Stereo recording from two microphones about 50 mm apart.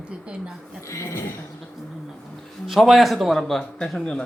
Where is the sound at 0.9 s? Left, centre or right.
Left.